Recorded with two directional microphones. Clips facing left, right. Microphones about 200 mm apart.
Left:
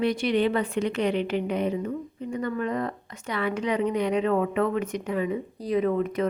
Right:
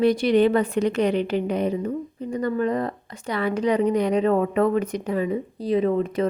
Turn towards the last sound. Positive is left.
turn(degrees=-30)  # may be behind; listen again after turning